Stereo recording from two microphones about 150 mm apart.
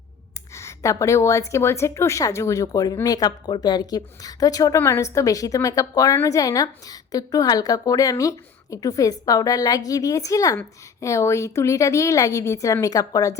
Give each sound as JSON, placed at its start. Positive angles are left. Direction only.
{"t": 0.5, "sound": "a woman's voice", "side_deg": 20}